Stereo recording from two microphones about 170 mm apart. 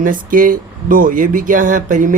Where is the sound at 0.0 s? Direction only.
55° right (ahead or behind).